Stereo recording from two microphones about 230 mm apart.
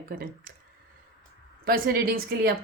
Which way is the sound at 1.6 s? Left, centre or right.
Right.